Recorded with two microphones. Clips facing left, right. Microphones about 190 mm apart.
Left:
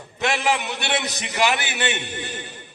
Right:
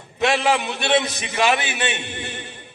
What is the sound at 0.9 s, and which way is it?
A man's voice, 25° right (ahead or behind).